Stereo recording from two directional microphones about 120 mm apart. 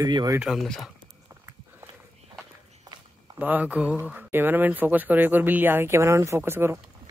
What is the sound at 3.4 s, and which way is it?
Speech, 10° right (ahead or behind).